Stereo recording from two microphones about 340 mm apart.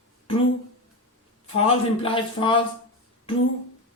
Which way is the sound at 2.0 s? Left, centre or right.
Centre.